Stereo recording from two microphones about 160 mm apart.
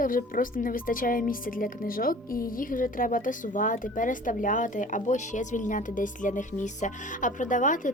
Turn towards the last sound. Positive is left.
turn(degrees=50)  # may be behind; listen again after turning